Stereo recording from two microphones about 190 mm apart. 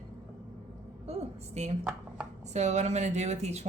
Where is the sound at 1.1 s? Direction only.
35° right (ahead or behind).